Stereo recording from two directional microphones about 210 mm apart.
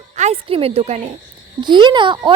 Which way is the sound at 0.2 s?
30° right (ahead or behind).